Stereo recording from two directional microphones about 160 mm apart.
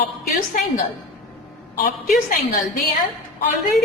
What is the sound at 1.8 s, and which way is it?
A woman's voice, 55° left (ahead or behind).